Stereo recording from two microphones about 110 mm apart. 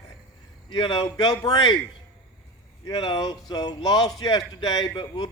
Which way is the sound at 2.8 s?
40° left (ahead or behind).